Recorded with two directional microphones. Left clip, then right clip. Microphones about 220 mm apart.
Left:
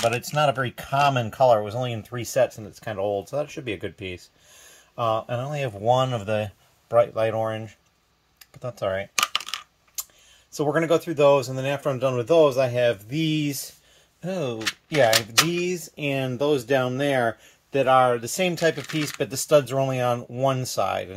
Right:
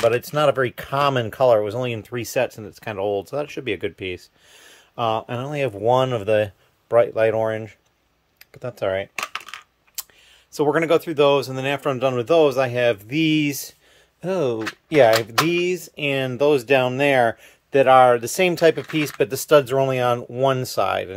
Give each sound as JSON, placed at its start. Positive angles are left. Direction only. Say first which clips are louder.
{"t": 0.3, "sound": "speech", "louder": "right 4 dB", "side_deg": -15}
{"t": 8.6, "sound": "coin", "louder": "right 3 dB", "side_deg": -15}
{"t": 10.5, "sound": "speech", "louder": "right 4 dB", "side_deg": -15}
{"t": 15.5, "sound": "speech", "louder": "right 5 dB", "side_deg": -10}